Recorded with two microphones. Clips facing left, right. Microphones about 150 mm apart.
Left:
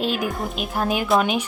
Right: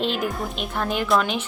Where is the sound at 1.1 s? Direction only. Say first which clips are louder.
Left 3 dB; 20° left (ahead or behind).